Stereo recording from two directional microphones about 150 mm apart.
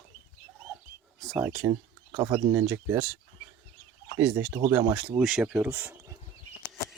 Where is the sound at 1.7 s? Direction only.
25° right (ahead or behind).